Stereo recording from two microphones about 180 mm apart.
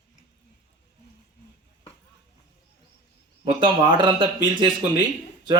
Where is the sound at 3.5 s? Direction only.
25° right (ahead or behind).